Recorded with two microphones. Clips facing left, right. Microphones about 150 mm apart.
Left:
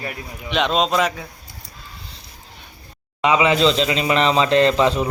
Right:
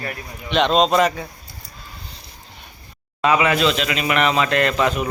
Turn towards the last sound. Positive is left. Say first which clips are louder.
# left 3 dB
turn(degrees=25)  # may be behind; listen again after turning